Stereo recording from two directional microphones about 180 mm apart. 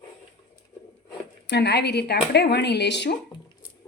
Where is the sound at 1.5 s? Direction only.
70° left (ahead or behind).